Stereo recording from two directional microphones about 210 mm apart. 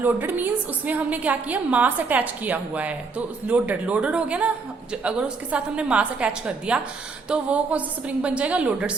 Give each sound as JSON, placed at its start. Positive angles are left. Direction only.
{"t": 0.0, "sound": "a woman's voice", "side_deg": -10}